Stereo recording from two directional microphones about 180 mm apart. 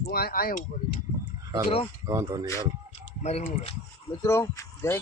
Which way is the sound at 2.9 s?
35° left (ahead or behind).